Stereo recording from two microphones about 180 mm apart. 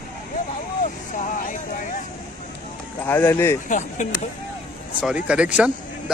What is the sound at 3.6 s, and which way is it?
Speech, 45° left (ahead or behind).